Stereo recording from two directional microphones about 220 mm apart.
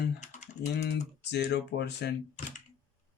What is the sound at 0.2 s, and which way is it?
Typing, 35° left (ahead or behind).